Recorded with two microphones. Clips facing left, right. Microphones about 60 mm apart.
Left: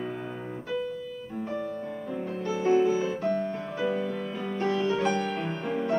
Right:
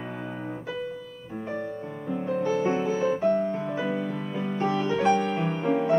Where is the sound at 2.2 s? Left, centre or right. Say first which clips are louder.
Right 2 dB; centre.